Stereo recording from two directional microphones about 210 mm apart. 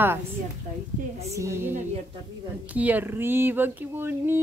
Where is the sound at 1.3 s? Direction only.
15° right (ahead or behind).